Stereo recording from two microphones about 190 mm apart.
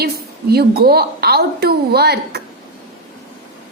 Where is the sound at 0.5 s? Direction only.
55° right (ahead or behind).